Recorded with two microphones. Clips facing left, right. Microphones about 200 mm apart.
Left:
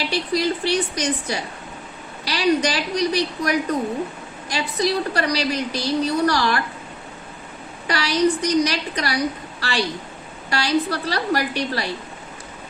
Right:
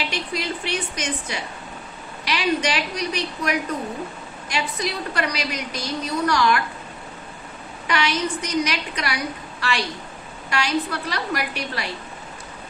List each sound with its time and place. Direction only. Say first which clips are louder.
0.1 s a woman's voice: left 6 dB; 35° left (ahead or behind)
7.9 s a woman's voice: left 4 dB; 35° left (ahead or behind)